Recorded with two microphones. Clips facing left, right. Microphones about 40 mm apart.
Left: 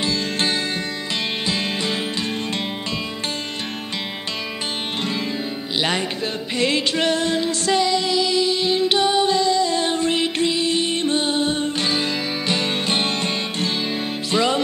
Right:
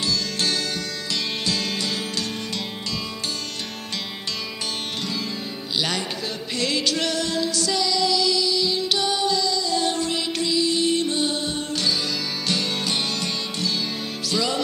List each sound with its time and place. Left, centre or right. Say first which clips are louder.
0.0 s music: left 3 dB; left
5.0 s music: left 4 dB; left